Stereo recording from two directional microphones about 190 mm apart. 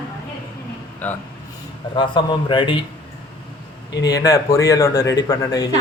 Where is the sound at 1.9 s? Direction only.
25° left (ahead or behind).